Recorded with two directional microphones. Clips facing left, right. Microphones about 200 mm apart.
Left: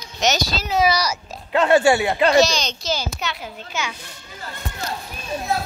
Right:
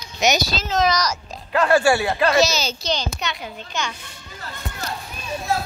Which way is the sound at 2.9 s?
5° left (ahead or behind).